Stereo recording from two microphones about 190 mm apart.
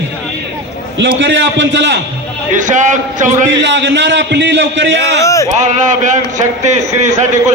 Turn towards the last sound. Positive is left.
turn(degrees=-40)  # may be behind; listen again after turning